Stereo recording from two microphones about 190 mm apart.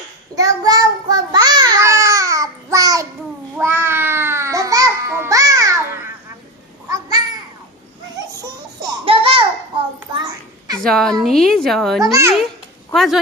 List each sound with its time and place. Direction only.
0.3 s child singing: 20° right (ahead or behind)
3.6 s babbling: 10° right (ahead or behind)
9.0 s babbling: 30° right (ahead or behind)
10.8 s a child's voice: centre (ahead or behind)